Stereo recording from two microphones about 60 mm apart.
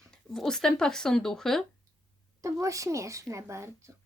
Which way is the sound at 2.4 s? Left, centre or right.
Right.